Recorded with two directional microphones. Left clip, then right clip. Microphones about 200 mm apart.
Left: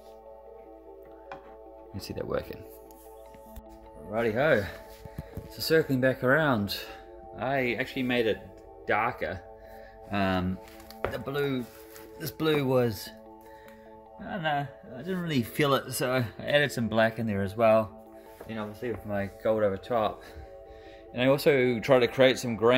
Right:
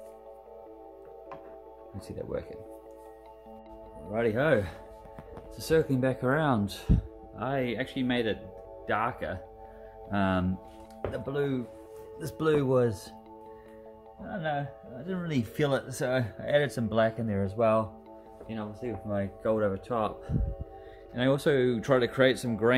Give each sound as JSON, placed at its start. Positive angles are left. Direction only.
{"t": 2.0, "sound": "speech", "side_deg": 25}
{"t": 4.1, "sound": "speech", "side_deg": 0}
{"t": 14.3, "sound": "speech", "side_deg": 10}